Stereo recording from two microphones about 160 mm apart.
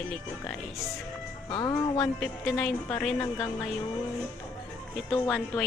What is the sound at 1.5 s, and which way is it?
Speech, 25° left (ahead or behind).